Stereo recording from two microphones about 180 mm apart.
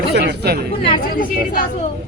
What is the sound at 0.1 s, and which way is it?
Speech, 65° right (ahead or behind).